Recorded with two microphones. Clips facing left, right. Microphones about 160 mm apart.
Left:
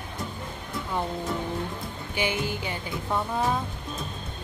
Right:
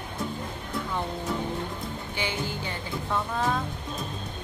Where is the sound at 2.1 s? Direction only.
15° left (ahead or behind).